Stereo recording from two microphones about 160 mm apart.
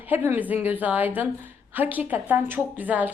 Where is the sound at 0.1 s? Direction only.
15° right (ahead or behind).